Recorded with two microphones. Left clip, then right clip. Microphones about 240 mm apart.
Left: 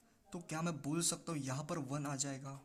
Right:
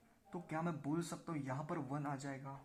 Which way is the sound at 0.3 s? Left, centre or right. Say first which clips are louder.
Even; left.